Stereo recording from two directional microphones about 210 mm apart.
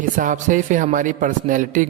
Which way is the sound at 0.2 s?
40° right (ahead or behind).